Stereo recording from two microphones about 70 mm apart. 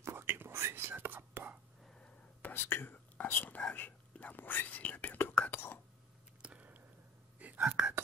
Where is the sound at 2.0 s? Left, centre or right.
Centre.